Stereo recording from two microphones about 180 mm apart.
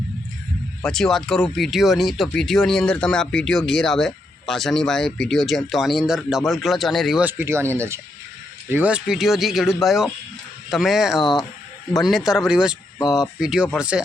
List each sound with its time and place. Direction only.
0.8 s speech: 5° left (ahead or behind)